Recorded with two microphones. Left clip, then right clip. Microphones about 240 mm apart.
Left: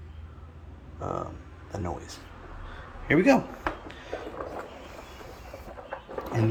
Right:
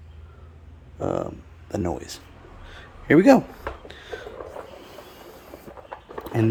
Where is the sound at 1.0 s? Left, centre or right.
Right.